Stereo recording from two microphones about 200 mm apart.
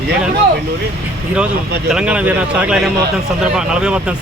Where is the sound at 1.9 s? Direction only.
5° right (ahead or behind).